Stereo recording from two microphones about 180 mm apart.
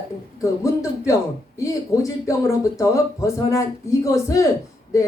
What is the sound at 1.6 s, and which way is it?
Speech, 15° left (ahead or behind).